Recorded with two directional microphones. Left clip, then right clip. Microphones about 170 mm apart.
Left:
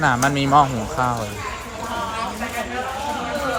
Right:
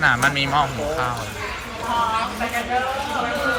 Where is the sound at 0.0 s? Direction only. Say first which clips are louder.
Right 1 dB; 30° left (ahead or behind).